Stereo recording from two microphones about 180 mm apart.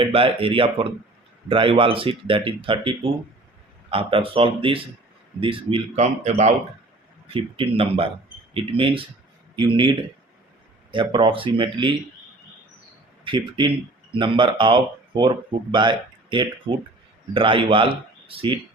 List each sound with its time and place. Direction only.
0.0 s speech: 30° right (ahead or behind)
13.2 s speech: 25° right (ahead or behind)